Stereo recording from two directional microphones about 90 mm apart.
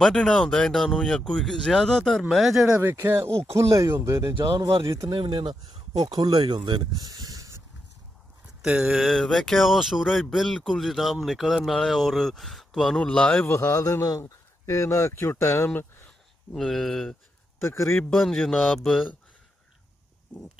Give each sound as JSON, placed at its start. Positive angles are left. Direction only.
{"t": 0.0, "sound": "speech", "side_deg": 5}
{"t": 2.8, "sound": "speech", "side_deg": -25}
{"t": 5.1, "sound": "speech", "side_deg": -65}
{"t": 8.6, "sound": "speech", "side_deg": -10}
{"t": 9.0, "sound": "speech", "side_deg": 0}
{"t": 13.5, "sound": "speech", "side_deg": 30}
{"t": 16.5, "sound": "speech", "side_deg": 5}
{"t": 17.6, "sound": "a man's voice", "side_deg": 30}
{"t": 17.9, "sound": "speech", "side_deg": 0}